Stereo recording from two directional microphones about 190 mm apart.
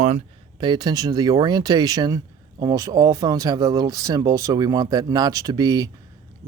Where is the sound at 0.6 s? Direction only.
20° right (ahead or behind).